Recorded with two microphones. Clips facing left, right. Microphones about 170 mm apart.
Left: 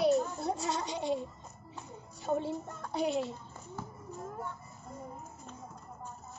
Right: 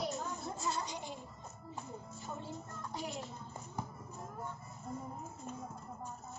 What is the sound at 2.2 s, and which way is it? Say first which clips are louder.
Music: left 14 dB; 70° left (ahead or behind).